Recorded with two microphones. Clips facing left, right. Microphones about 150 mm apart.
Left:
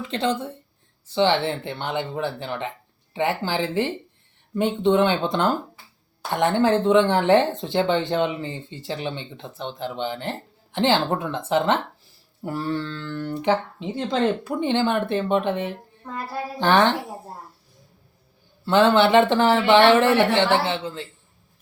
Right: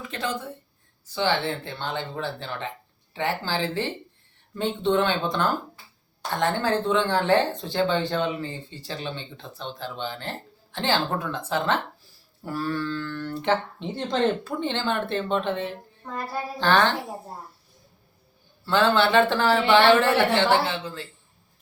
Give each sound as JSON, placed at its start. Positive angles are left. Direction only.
{"t": 0.1, "sound": "speech", "side_deg": 30}
{"t": 18.6, "sound": "speech", "side_deg": 20}